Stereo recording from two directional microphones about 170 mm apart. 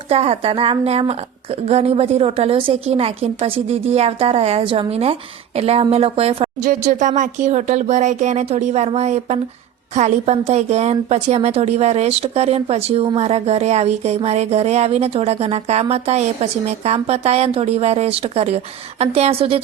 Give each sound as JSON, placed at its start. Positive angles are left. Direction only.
{"t": 0.1, "sound": "speech", "side_deg": -35}
{"t": 6.6, "sound": "speech", "side_deg": -50}